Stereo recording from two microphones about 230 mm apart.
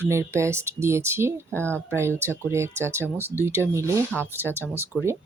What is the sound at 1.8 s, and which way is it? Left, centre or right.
Speech, centre.